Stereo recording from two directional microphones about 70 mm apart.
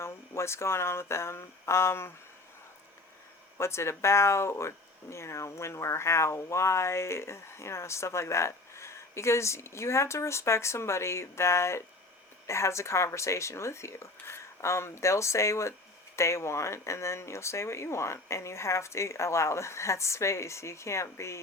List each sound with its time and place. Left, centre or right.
0.0 s speech: left
3.6 s speech: left